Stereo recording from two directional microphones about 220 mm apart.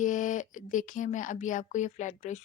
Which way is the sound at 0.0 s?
35° left (ahead or behind).